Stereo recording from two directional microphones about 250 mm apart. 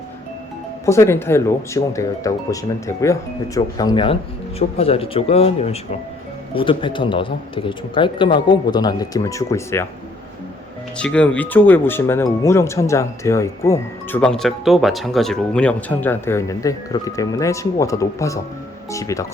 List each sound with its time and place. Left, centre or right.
0.9 s speech: centre
10.9 s speech: centre